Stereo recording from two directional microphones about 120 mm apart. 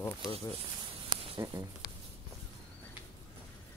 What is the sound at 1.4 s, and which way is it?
Speech, 30° right (ahead or behind).